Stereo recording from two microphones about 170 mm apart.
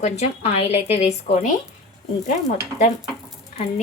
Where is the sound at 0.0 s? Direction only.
35° left (ahead or behind).